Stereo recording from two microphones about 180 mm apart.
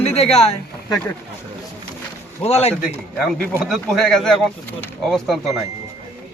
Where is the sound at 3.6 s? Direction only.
Centre (ahead or behind).